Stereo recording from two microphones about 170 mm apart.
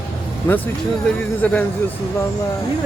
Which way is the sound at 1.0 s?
10° left (ahead or behind).